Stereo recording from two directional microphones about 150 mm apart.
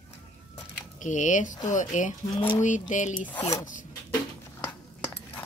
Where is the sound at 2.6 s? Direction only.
55° left (ahead or behind).